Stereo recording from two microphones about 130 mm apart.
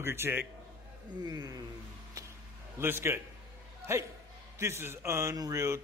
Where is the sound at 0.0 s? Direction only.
20° right (ahead or behind).